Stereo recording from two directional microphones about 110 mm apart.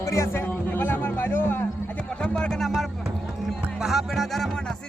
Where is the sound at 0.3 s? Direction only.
15° left (ahead or behind).